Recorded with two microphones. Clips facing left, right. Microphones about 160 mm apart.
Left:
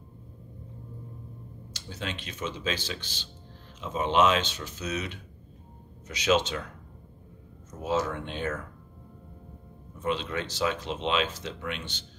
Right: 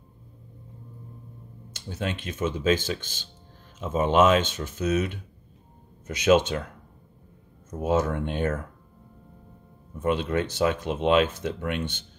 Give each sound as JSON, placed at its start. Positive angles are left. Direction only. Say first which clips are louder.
{"t": 1.7, "sound": "speech", "louder": "right 6 dB", "side_deg": -50}
{"t": 7.8, "sound": "speech", "louder": "right 4 dB", "side_deg": -50}
{"t": 9.9, "sound": "speech", "louder": "right 5 dB", "side_deg": -50}